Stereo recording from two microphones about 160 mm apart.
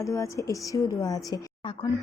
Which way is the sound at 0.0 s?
20° left (ahead or behind).